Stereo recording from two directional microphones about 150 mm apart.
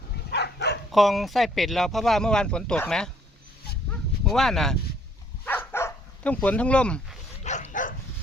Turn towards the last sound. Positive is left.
turn(degrees=60)  # may be behind; listen again after turning